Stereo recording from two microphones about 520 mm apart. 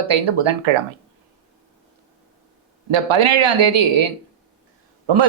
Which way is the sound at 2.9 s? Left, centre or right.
Right.